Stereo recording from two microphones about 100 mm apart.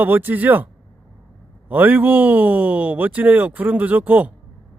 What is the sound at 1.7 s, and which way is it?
Speech, 15° right (ahead or behind).